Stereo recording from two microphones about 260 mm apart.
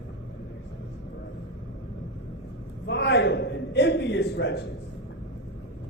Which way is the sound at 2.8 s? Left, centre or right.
Left.